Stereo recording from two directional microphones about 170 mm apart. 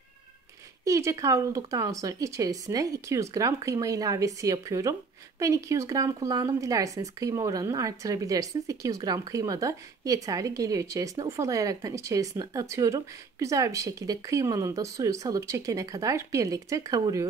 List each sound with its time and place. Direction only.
0.8 s speech: 20° right (ahead or behind)